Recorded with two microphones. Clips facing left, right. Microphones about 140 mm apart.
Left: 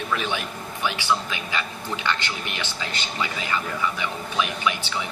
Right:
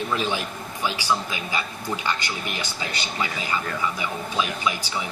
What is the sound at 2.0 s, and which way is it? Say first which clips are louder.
Speech: left 3 dB; 15° right (ahead or behind).